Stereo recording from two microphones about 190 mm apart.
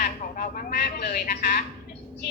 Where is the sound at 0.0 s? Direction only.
45° left (ahead or behind).